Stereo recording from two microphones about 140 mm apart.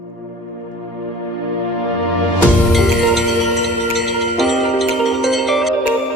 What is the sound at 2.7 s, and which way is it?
Music, centre (ahead or behind).